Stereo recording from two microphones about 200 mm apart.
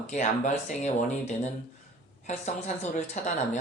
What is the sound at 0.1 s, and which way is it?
Speech, 35° left (ahead or behind).